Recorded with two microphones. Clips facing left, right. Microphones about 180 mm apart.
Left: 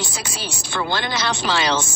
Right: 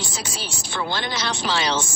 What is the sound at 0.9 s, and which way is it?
Speech, 60° left (ahead or behind).